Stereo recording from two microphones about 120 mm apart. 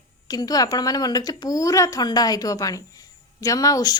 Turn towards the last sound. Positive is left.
turn(degrees=30)  # may be behind; listen again after turning